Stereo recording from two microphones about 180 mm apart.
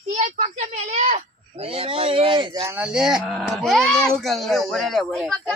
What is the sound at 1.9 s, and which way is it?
Speech, 30° right (ahead or behind).